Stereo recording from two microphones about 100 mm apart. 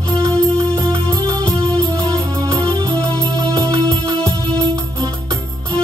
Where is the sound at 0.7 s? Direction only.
40° right (ahead or behind).